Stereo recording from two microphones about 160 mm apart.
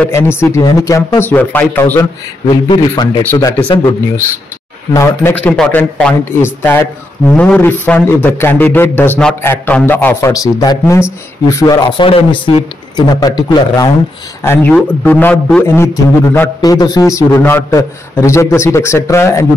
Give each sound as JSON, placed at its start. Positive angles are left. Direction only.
{"t": 0.0, "sound": "a man's voice", "side_deg": 15}
{"t": 2.4, "sound": "a man's voice", "side_deg": 30}
{"t": 4.9, "sound": "a man's voice", "side_deg": 15}
{"t": 14.4, "sound": "a man's voice", "side_deg": 10}